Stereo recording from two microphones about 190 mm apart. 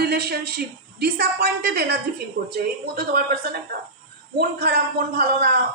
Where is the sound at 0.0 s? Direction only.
55° right (ahead or behind).